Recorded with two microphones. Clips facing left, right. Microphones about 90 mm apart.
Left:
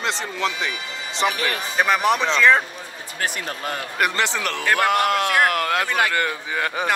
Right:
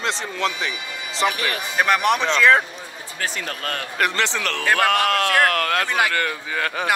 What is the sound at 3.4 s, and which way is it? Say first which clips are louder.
Speech: even; 15° left (ahead or behind).